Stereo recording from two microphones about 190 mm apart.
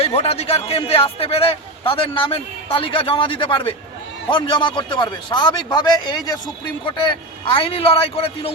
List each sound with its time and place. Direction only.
0.0 s a man's voice: 30° left (ahead or behind)